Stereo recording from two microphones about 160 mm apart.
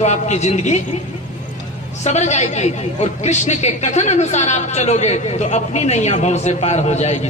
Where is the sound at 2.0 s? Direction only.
45° left (ahead or behind).